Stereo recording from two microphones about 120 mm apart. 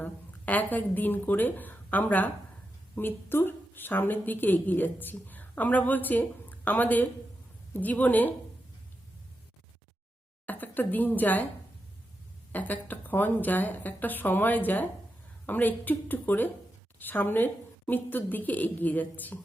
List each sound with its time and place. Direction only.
0.0 s a woman's voice: 15° left (ahead or behind)
10.4 s a woman's voice: 15° left (ahead or behind)
12.5 s a woman's voice: 15° left (ahead or behind)